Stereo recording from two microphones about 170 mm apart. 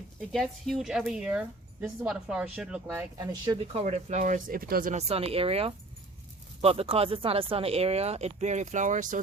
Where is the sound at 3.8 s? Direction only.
45° right (ahead or behind); by 4.9 s 60° right (ahead or behind).